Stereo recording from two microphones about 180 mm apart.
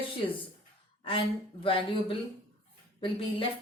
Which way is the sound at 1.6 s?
30° left (ahead or behind).